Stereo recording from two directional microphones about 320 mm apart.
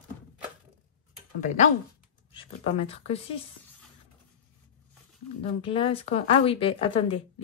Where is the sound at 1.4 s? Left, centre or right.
Left.